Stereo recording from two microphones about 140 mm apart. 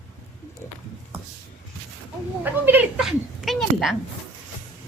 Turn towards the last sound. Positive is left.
turn(degrees=0)  # may be behind; listen again after turning